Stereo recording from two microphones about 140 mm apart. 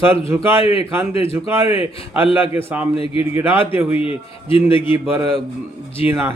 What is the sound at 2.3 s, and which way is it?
A man's voice, 15° right (ahead or behind).